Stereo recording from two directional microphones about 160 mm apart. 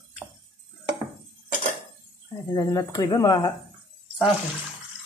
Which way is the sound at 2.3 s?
20° left (ahead or behind).